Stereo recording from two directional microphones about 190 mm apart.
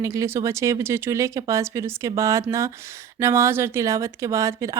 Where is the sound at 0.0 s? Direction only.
15° right (ahead or behind).